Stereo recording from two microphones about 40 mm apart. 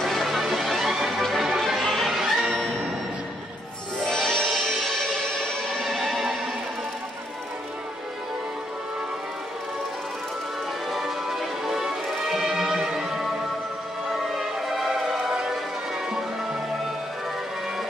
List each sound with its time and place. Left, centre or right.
0.0 s music: centre
4.0 s music: centre
4.6 s music: centre
5.9 s music: centre
10.9 s music: centre
14.3 s music: centre